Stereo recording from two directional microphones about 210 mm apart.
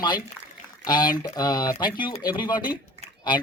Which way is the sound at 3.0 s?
20° left (ahead or behind).